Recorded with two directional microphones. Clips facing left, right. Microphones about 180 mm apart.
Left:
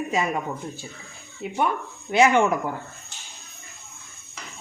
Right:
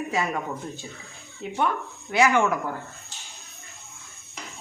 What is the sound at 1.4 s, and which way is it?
Speech, 10° left (ahead or behind).